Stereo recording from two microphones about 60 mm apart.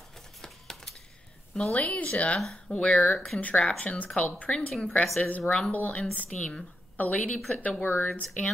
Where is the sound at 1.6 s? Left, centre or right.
Left.